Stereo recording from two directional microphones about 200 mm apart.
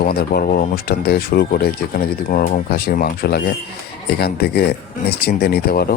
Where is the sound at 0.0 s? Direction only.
50° left (ahead or behind).